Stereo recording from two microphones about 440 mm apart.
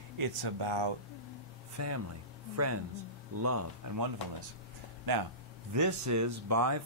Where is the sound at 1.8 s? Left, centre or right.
Right.